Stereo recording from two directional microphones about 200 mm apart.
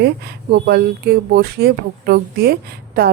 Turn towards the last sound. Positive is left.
turn(degrees=-50)  # may be behind; listen again after turning